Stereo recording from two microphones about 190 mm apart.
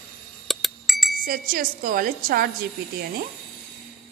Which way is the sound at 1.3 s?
50° right (ahead or behind).